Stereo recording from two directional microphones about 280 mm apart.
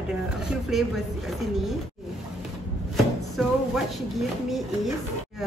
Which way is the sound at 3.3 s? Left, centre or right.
Centre.